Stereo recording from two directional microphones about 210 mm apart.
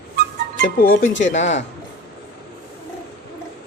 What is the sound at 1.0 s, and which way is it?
Speech, 60° left (ahead or behind).